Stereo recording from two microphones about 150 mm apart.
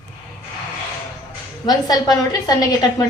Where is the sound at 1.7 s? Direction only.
25° left (ahead or behind).